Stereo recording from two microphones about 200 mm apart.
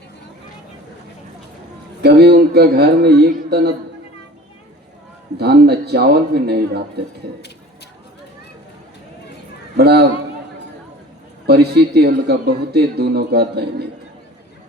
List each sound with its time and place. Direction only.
2.0 s a man's voice: 55° right (ahead or behind)
5.4 s a man's voice: 55° right (ahead or behind)
9.7 s a man's voice: 50° right (ahead or behind)
11.4 s a man's voice: 55° right (ahead or behind)